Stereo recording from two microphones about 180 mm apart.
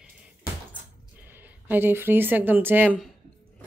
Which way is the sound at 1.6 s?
10° right (ahead or behind).